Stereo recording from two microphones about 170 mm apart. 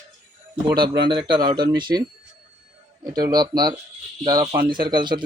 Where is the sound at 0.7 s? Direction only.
25° right (ahead or behind).